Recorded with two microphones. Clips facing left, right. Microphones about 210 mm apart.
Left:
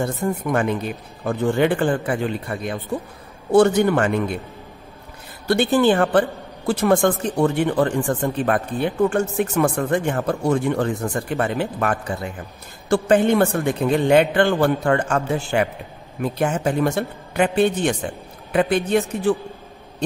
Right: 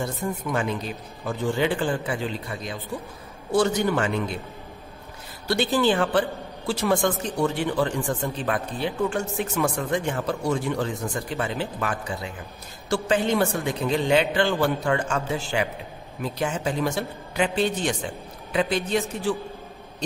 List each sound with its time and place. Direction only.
0.0 s a woman's voice: 55° left (ahead or behind)
5.5 s a woman's voice: 55° left (ahead or behind)